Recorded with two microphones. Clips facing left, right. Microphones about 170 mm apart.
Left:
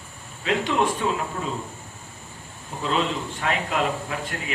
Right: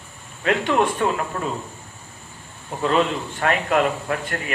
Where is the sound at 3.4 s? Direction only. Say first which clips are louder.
Right 6 dB; 55° right (ahead or behind).